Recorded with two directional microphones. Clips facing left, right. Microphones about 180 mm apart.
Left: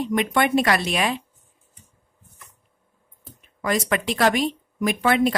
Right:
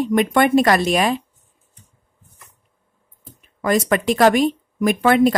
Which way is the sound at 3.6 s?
45° right (ahead or behind).